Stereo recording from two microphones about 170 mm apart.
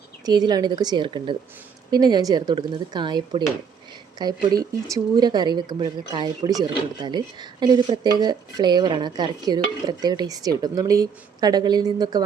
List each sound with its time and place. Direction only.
0.3 s speech: 25° right (ahead or behind)